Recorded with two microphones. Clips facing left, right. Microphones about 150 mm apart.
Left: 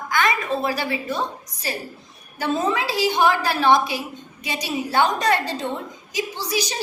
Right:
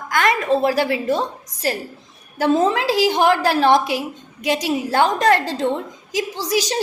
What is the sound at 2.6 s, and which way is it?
A woman's voice, 90° right.